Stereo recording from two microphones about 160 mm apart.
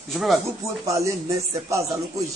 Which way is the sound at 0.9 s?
20° right (ahead or behind).